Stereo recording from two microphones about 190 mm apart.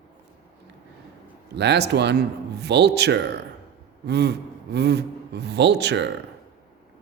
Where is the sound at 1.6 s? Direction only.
60° right (ahead or behind).